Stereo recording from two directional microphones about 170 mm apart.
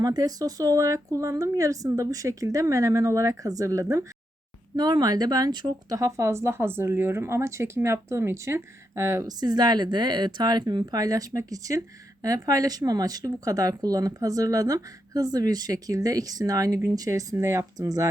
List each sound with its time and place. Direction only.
0.0 s speech: 20° right (ahead or behind)